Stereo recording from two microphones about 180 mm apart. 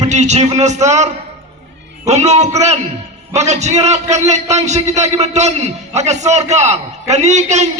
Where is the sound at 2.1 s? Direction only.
40° right (ahead or behind).